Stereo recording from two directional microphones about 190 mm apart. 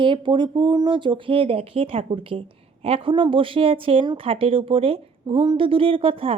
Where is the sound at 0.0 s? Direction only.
25° right (ahead or behind).